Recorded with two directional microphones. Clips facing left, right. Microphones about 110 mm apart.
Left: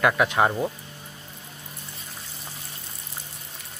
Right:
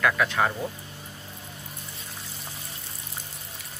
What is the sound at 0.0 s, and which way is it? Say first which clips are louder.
Speech: left 3 dB; 20° left (ahead or behind).